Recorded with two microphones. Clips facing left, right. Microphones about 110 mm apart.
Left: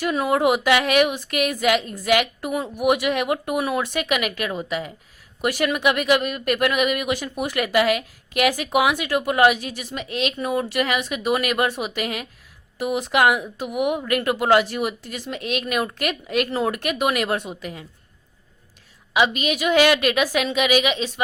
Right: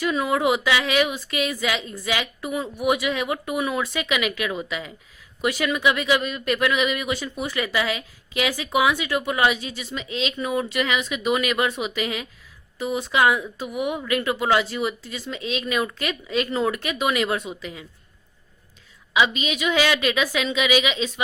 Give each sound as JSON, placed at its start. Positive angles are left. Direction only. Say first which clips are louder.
{"t": 0.0, "sound": "speech", "louder": "left 2 dB", "side_deg": 50}
{"t": 19.1, "sound": "speech", "louder": "left 1 dB", "side_deg": 50}